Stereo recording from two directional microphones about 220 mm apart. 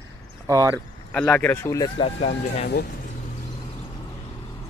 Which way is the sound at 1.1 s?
5° left (ahead or behind).